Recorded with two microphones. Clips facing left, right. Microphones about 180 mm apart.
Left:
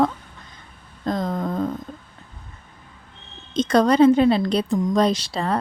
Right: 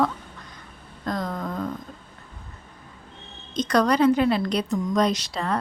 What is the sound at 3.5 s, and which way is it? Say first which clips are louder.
A woman's voice: left 4 dB; 25° left (ahead or behind).